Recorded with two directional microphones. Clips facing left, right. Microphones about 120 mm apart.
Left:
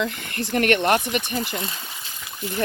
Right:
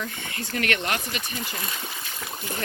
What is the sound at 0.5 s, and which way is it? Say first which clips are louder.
Speech: left 8 dB; 50° left (ahead or behind).